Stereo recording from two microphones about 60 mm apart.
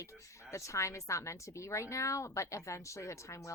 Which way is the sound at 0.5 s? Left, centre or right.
Left.